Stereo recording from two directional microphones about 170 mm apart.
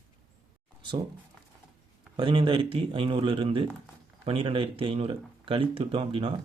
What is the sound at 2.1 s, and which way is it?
Speech, 30° right (ahead or behind).